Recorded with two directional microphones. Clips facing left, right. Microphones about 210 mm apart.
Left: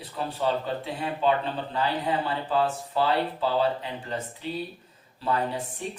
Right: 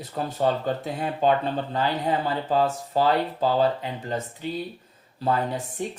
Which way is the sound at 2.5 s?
45° right (ahead or behind).